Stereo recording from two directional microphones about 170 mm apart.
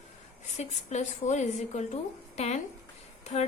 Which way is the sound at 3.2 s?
40° left (ahead or behind).